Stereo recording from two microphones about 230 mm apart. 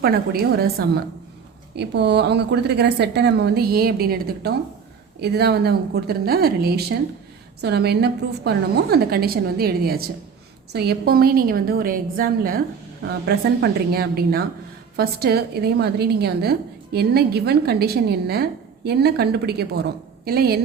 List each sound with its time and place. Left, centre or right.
0.0 s a woman's voice: right